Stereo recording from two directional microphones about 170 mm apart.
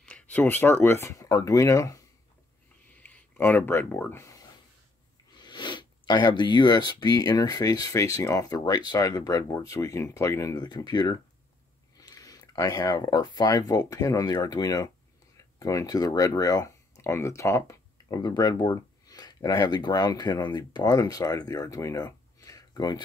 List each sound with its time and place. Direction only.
0.0 s speech: 10° left (ahead or behind)